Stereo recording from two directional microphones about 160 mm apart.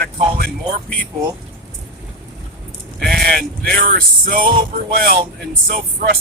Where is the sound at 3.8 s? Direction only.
65° right (ahead or behind).